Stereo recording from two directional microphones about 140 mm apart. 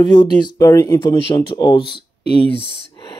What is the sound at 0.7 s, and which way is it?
Speech, 20° left (ahead or behind).